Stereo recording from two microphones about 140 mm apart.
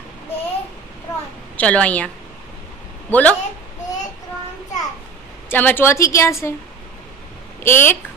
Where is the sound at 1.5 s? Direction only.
10° left (ahead or behind).